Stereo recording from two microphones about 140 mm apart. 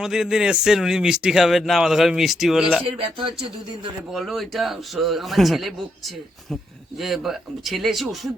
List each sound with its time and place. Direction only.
0.0 s speech: 5° right (ahead or behind)
3.0 s speech: 40° right (ahead or behind)
4.1 s speech: centre (ahead or behind)
7.0 s speech: centre (ahead or behind)